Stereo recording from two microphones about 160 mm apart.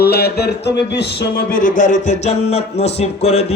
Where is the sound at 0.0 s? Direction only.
80° left; by 2.1 s 55° left (ahead or behind).